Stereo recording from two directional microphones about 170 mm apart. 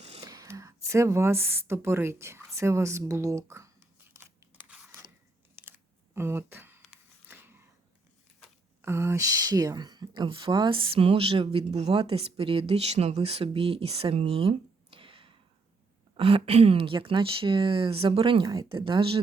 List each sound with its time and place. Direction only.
0.2 s speech: 20° right (ahead or behind)
4.1 s crunch: 15° right (ahead or behind)
6.1 s a sound: 15° right (ahead or behind)
8.4 s speech: 15° right (ahead or behind); by 19.2 s 30° right (ahead or behind)